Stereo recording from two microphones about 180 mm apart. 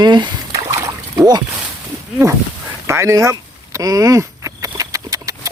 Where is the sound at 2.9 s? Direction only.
15° right (ahead or behind).